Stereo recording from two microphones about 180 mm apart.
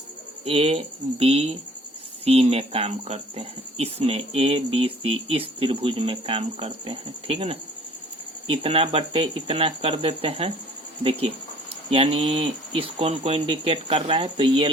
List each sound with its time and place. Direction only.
0.4 s speech: 35° right (ahead or behind)
11.9 s speech: 30° right (ahead or behind)